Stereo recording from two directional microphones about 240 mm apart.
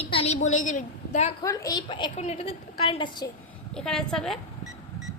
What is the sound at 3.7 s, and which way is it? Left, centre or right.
Speech, centre.